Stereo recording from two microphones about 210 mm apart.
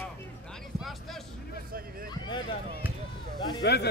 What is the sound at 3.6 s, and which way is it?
Speech, 50° left (ahead or behind).